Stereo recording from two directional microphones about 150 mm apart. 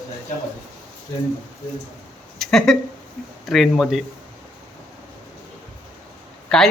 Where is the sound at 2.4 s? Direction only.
Centre (ahead or behind).